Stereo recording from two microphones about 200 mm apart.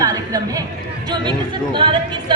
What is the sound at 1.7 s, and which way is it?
Speech, 25° right (ahead or behind).